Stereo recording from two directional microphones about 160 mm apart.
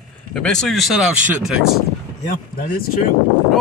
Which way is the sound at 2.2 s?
65° left (ahead or behind).